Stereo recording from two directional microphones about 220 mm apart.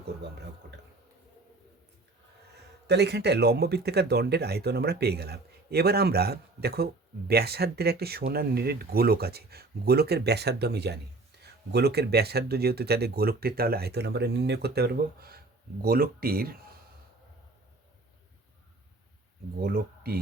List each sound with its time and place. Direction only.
2.8 s speech: 50° right (ahead or behind)
19.5 s speech: 45° right (ahead or behind)